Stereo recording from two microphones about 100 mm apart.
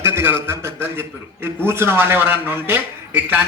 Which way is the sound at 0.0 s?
25° right (ahead or behind).